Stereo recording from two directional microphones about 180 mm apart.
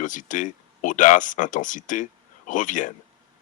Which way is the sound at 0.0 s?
45° left (ahead or behind).